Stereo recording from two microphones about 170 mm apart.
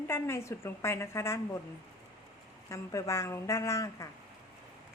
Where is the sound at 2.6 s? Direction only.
15° left (ahead or behind).